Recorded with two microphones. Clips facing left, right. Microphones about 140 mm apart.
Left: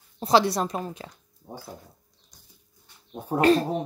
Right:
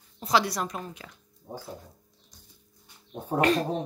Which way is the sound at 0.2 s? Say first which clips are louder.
Left 5 dB; 30° left (ahead or behind).